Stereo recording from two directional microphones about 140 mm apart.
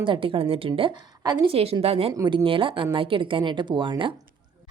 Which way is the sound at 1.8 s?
45° right (ahead or behind).